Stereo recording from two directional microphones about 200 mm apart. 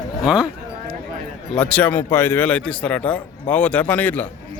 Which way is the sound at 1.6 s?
5° left (ahead or behind).